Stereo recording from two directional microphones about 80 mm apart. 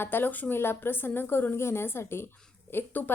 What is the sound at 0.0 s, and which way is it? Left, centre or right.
A woman's voice, left.